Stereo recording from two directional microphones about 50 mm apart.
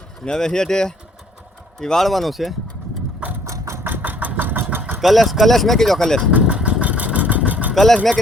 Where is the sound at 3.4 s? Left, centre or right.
Right.